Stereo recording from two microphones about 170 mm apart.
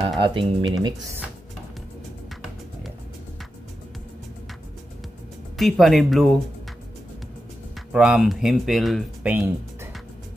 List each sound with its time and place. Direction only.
0.2 s speech: 30° right (ahead or behind)
5.6 s speech: centre (ahead or behind)
7.9 s speech: 5° right (ahead or behind)
9.3 s speech: 15° right (ahead or behind)